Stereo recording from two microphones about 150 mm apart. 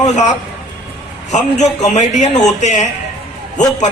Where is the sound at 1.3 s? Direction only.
50° left (ahead or behind).